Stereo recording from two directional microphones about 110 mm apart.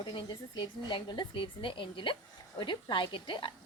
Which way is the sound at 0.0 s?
45° left (ahead or behind).